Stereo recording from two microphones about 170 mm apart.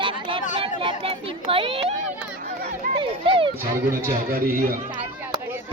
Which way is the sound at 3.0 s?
30° right (ahead or behind).